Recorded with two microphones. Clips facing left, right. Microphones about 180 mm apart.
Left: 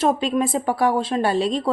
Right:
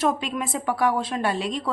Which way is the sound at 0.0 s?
30° left (ahead or behind).